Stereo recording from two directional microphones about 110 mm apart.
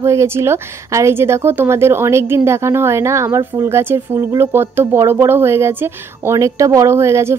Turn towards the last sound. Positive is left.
turn(degrees=-25)  # may be behind; listen again after turning